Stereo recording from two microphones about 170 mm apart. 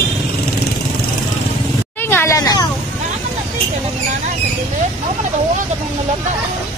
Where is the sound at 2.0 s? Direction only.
10° left (ahead or behind).